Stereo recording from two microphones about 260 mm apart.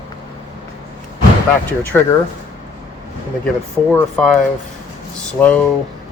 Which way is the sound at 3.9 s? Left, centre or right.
Centre.